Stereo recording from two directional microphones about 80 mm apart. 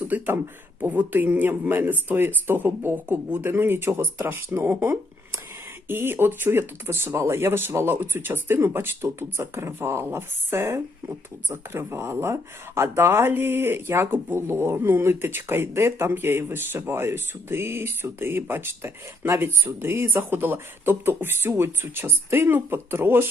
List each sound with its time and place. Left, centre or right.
0.1 s speech: right